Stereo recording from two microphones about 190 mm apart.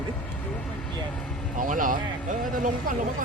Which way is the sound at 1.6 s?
45° right (ahead or behind).